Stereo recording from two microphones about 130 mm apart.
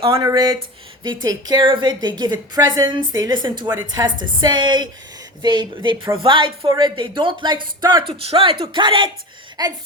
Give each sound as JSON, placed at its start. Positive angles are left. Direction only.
{"t": 0.2, "sound": "a woman's voice", "side_deg": -30}
{"t": 8.0, "sound": "speech", "side_deg": -45}